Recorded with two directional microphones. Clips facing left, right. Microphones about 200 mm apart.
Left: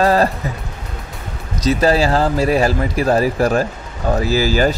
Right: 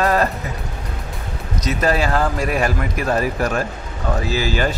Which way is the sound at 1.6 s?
30° left (ahead or behind).